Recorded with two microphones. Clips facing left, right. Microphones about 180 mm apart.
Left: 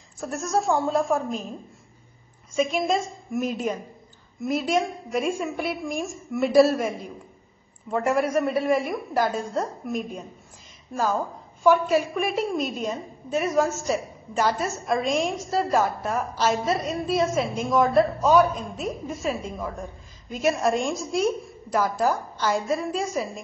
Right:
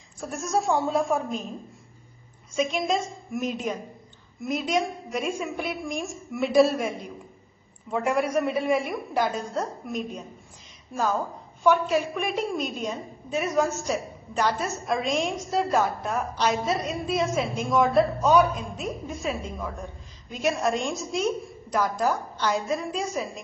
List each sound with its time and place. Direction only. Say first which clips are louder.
0.2 s a woman's voice: left 1 dB; centre (ahead or behind)
2.5 s a woman's voice: left 2 dB; 5° left (ahead or behind)
7.9 s a woman's voice: left 2 dB; centre (ahead or behind)